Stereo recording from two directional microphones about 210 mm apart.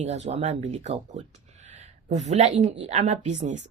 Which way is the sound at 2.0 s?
35° right (ahead or behind).